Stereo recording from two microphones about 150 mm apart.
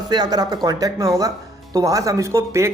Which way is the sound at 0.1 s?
25° right (ahead or behind).